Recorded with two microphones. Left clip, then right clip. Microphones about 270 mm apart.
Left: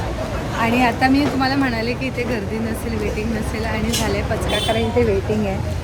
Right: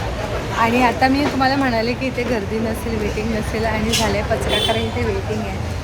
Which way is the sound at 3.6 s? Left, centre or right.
Centre.